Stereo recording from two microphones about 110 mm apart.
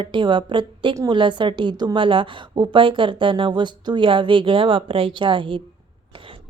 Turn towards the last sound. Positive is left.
turn(degrees=-50)  # may be behind; listen again after turning